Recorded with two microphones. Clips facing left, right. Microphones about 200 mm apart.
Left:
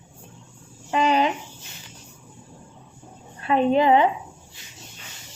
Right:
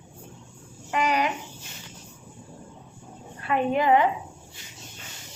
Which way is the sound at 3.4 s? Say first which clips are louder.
Left 4 dB; 25° left (ahead or behind).